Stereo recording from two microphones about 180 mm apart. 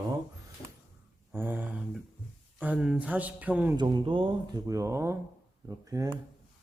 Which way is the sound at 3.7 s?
25° right (ahead or behind).